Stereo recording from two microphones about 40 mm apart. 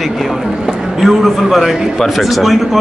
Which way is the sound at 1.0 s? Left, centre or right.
Centre.